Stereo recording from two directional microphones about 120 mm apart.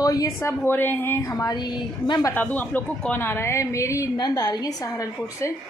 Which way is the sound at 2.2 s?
15° left (ahead or behind).